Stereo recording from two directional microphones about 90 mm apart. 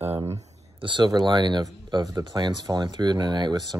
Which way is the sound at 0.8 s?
55° right (ahead or behind).